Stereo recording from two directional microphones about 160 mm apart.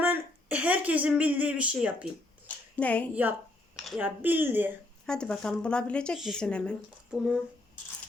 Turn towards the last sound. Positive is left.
turn(degrees=-5)  # may be behind; listen again after turning